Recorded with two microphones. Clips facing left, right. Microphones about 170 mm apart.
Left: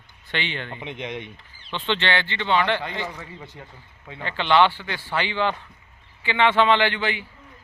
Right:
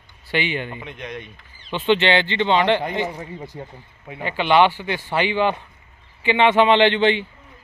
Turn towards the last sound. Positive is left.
turn(degrees=-25)  # may be behind; listen again after turning